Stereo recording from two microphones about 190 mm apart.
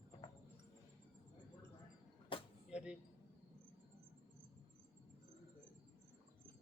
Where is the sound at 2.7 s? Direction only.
5° right (ahead or behind).